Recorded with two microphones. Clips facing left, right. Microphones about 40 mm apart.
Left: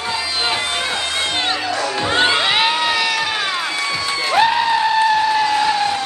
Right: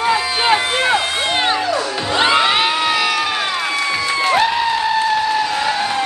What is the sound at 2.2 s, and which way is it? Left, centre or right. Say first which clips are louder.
Music: right 4 dB; centre.